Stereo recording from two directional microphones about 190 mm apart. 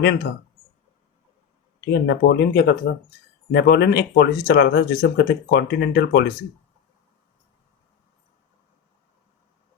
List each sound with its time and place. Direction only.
1.8 s speech: 65° left (ahead or behind)